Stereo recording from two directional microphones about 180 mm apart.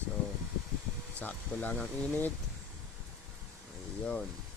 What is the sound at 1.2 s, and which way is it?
Speech, 10° left (ahead or behind).